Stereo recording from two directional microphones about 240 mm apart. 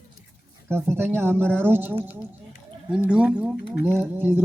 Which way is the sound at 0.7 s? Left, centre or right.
Centre.